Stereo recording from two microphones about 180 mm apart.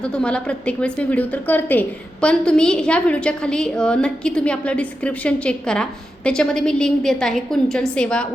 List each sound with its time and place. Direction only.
0.0 s a woman's voice: 5° left (ahead or behind)